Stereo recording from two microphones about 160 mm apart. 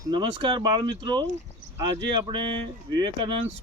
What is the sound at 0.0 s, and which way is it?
Speech, 30° right (ahead or behind).